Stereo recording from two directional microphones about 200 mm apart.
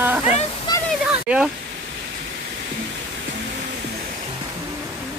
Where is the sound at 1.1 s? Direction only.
5° right (ahead or behind).